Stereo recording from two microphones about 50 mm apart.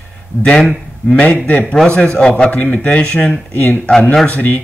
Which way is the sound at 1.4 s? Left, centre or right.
Left.